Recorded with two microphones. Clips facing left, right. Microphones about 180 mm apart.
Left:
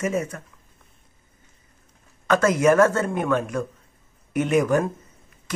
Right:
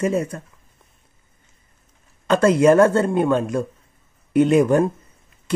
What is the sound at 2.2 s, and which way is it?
Speech, 30° right (ahead or behind).